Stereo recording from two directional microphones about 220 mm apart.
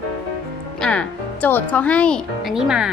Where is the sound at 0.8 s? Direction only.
5° left (ahead or behind).